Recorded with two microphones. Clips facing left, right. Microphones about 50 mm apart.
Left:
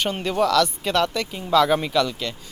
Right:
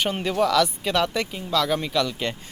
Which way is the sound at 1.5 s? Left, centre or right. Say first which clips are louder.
Left 5 dB; centre.